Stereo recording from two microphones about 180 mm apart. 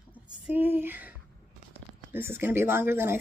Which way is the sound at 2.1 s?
10° right (ahead or behind).